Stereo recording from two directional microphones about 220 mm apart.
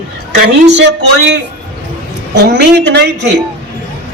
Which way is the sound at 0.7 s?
50° right (ahead or behind).